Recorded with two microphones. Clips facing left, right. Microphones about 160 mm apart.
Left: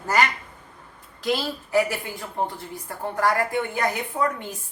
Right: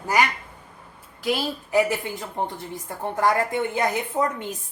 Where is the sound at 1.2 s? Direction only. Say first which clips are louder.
Even; 10° right (ahead or behind).